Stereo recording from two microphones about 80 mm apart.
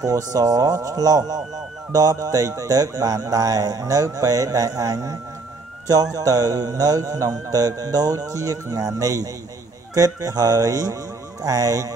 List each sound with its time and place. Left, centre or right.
0.0 s speech: right